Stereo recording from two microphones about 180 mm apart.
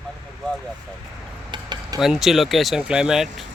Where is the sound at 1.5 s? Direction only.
25° right (ahead or behind).